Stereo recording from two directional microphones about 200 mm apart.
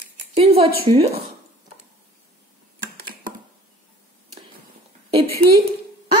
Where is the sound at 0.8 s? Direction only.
30° right (ahead or behind).